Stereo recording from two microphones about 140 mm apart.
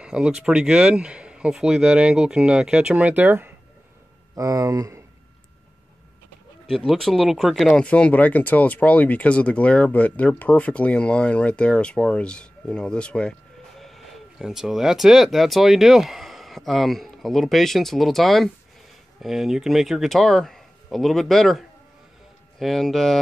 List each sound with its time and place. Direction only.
0.0 s speech: 5° right (ahead or behind); by 5.0 s 20° right (ahead or behind)
6.9 s speech: centre (ahead or behind)